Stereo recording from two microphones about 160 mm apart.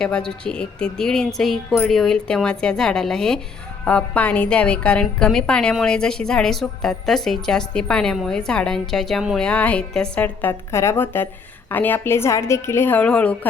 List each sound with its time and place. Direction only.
0.0 s a woman's voice: 5° left (ahead or behind)